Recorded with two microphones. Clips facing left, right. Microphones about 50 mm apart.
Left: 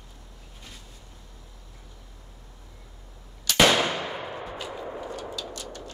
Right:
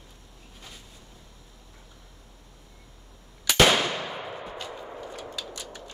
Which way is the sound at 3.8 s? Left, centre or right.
Centre.